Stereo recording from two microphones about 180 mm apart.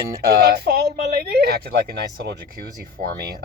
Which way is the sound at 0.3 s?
60° right (ahead or behind).